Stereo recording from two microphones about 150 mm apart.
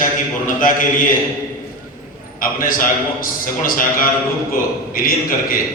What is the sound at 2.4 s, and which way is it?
A man's voice, 65° left (ahead or behind).